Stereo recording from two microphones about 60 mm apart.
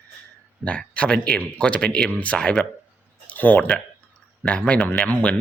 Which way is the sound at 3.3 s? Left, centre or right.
Left.